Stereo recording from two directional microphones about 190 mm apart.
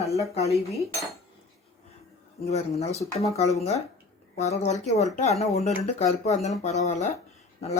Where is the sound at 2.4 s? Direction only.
35° left (ahead or behind).